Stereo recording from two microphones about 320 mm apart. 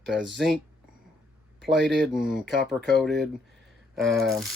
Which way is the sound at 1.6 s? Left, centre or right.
Centre.